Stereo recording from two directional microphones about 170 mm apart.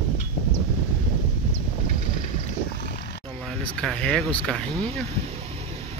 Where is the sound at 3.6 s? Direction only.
5° left (ahead or behind).